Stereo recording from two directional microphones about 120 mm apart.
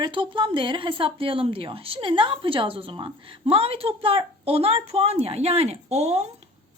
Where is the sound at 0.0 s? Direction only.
45° right (ahead or behind).